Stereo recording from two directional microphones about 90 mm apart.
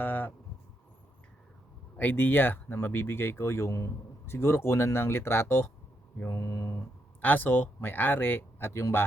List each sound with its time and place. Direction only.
0.0 s a sound: 20° left (ahead or behind)
2.0 s a man's voice: 20° left (ahead or behind)
7.2 s a man's voice: 20° left (ahead or behind)